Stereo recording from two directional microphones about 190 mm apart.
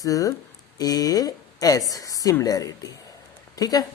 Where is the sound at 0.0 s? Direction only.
20° left (ahead or behind).